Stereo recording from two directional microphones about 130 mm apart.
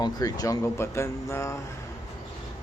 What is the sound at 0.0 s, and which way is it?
Speech, 30° left (ahead or behind).